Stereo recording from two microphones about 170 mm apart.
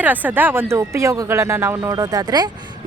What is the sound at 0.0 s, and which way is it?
Speech, 10° right (ahead or behind).